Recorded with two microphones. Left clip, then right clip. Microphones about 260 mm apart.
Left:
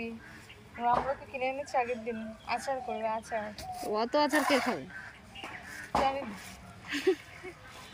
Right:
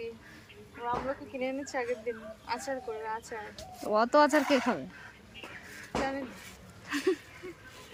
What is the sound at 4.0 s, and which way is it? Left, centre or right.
Speech, centre.